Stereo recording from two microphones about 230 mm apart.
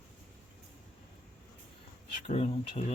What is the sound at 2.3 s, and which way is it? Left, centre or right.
Speech, left.